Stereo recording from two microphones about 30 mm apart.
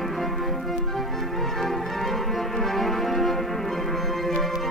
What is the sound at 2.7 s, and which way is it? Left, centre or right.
Music, centre.